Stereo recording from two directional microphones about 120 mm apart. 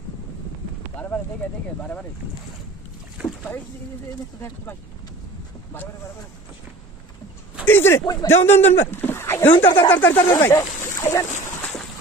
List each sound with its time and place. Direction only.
0.9 s a sound: 15° left (ahead or behind)
1.4 s speech: 15° left (ahead or behind)
3.2 s boat: 10° right (ahead or behind)
7.6 s a sound: 20° left (ahead or behind)
8.0 s speech: 35° left (ahead or behind)
8.3 s speech: 20° left (ahead or behind)